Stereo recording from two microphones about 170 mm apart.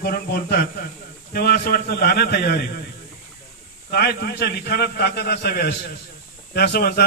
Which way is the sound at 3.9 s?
65° left (ahead or behind).